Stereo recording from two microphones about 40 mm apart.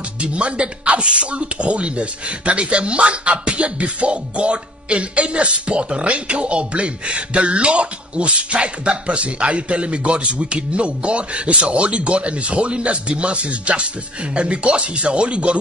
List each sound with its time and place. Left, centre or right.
0.2 s speech: right